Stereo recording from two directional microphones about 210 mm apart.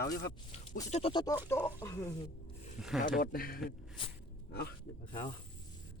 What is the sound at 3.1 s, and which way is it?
Speech, 45° left (ahead or behind).